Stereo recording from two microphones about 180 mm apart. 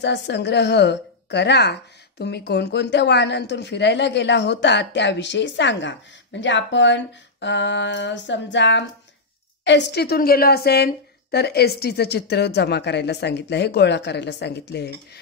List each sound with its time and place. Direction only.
0.0 s a woman's voice: 75° left (ahead or behind)
9.7 s a woman's voice: 75° left (ahead or behind)